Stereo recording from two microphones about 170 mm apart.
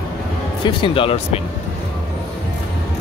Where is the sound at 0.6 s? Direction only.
30° left (ahead or behind).